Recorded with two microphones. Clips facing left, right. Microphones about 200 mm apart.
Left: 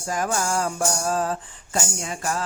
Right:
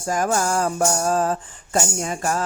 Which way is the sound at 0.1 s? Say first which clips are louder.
Right 4 dB; 45° right (ahead or behind).